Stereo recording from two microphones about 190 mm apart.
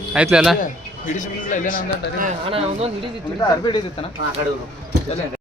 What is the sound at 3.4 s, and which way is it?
Speech, 25° left (ahead or behind).